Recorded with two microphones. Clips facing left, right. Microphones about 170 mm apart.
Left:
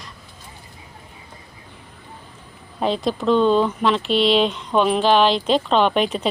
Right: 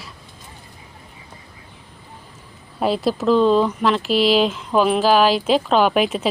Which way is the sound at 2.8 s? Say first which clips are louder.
Right 2 dB; 5° right (ahead or behind).